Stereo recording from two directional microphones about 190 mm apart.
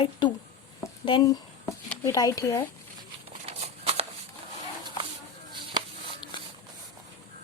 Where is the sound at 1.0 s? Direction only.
25° left (ahead or behind).